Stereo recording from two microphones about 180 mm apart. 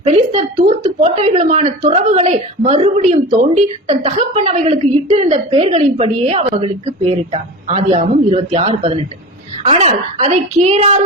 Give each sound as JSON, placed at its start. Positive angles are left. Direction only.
{"t": 0.3, "sound": "speech", "side_deg": -35}